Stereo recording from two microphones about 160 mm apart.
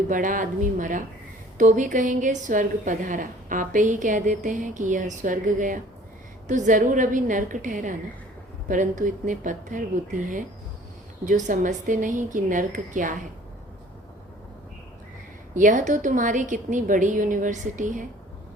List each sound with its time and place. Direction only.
0.1 s a woman's voice: 55° right (ahead or behind)
15.5 s a woman's voice: 50° right (ahead or behind)